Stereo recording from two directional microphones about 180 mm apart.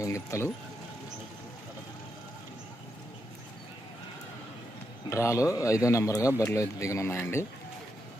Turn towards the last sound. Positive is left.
turn(degrees=15)  # may be behind; listen again after turning